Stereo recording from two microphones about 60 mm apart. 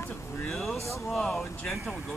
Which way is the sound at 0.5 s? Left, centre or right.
Centre.